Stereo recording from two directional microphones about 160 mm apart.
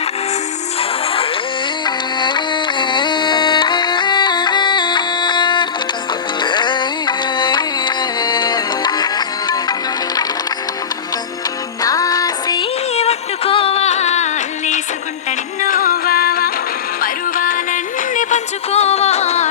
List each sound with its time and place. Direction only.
0.8 s music: 35° left (ahead or behind)
11.8 s music: 20° left (ahead or behind)
13.0 s music: 40° left (ahead or behind)
15.6 s music: 60° left (ahead or behind)
17.0 s music: 60° left (ahead or behind); by 19.5 s 45° left (ahead or behind)